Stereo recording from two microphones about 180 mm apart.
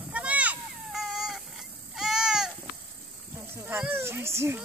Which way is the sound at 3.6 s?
10° right (ahead or behind).